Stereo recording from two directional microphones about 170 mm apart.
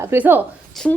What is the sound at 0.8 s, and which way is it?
Speech, centre (ahead or behind).